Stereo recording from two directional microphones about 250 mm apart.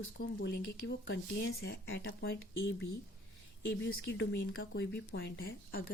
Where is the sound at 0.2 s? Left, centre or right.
Left.